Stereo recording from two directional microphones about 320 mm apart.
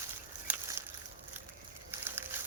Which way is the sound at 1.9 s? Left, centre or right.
Centre.